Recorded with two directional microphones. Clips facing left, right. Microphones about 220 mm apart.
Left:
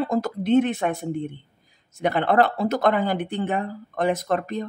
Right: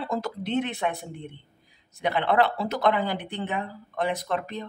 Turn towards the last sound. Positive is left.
turn(degrees=45)  # may be behind; listen again after turning